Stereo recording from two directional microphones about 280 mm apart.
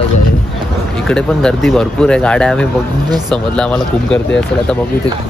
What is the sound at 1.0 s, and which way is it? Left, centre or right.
Speech, centre.